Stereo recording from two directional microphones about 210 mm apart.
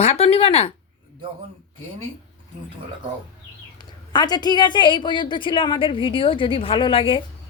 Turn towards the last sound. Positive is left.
turn(degrees=25)  # may be behind; listen again after turning